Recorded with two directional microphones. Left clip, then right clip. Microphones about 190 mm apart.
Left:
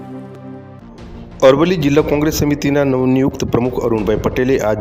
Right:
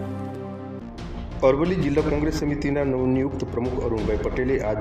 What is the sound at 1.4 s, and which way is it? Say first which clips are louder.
A man's voice: left 9 dB; 45° left (ahead or behind).